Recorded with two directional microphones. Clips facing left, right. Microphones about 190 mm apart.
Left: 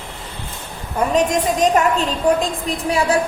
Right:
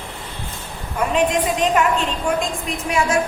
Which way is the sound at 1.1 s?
45° left (ahead or behind).